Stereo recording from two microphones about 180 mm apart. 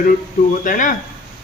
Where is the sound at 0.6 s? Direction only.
45° left (ahead or behind).